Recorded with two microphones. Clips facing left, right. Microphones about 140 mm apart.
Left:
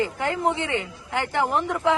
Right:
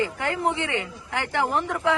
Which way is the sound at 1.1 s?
Centre (ahead or behind).